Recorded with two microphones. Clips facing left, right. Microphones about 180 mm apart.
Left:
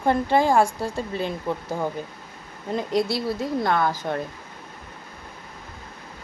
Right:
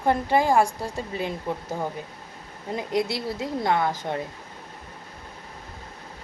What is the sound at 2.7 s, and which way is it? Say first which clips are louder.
A woman's voice: left 3 dB; 20° right (ahead or behind).